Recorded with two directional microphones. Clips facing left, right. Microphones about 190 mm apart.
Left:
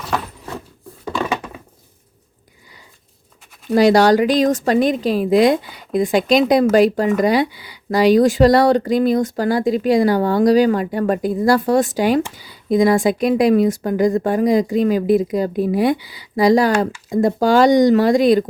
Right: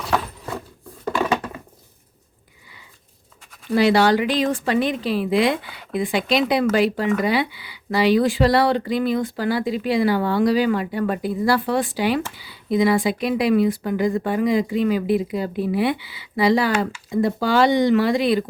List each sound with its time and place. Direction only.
3.8 s speech: 40° left (ahead or behind)